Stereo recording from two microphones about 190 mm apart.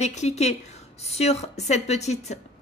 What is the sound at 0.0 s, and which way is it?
A woman's voice, 35° left (ahead or behind).